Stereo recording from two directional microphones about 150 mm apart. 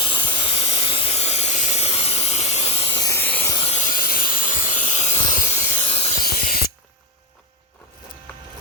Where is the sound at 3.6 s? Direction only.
45° left (ahead or behind).